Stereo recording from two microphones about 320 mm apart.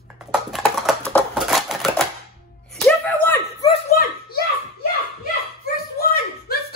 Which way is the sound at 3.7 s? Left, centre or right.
Left.